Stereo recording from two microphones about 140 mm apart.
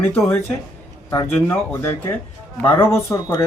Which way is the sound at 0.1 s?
15° left (ahead or behind).